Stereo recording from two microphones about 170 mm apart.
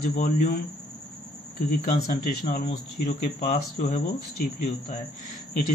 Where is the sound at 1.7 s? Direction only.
55° left (ahead or behind).